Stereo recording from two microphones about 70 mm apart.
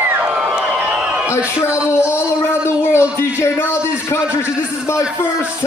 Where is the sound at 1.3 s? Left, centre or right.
Left.